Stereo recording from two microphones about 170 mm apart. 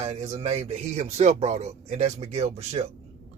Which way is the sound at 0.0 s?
40° right (ahead or behind).